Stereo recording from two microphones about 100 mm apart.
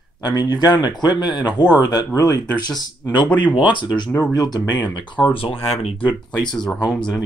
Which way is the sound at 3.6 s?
50° left (ahead or behind).